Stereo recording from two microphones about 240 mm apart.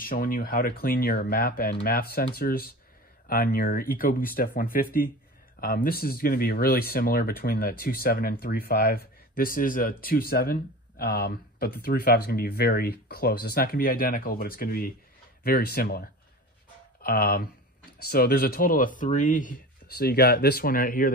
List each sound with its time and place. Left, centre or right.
0.0 s speech: left